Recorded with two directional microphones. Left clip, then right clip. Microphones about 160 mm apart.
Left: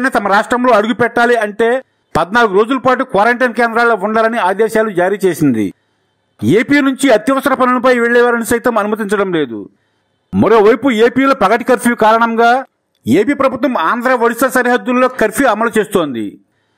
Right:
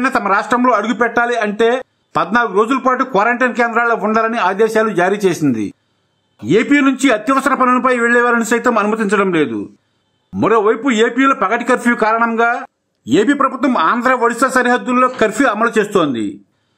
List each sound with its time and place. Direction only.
0.0 s a man's voice: 45° left (ahead or behind)
13.0 s a man's voice: 30° left (ahead or behind)